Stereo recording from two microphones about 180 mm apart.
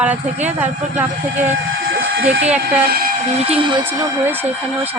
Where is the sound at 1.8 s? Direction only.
55° right (ahead or behind); by 2.4 s 90° right.